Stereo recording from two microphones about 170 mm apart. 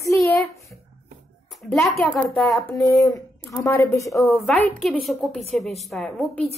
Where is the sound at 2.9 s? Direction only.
15° left (ahead or behind).